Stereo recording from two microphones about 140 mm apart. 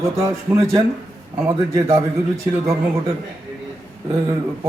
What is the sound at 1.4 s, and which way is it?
A man's voice, 20° right (ahead or behind).